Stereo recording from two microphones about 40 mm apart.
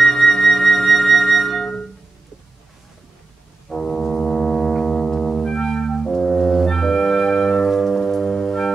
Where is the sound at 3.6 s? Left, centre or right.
Centre.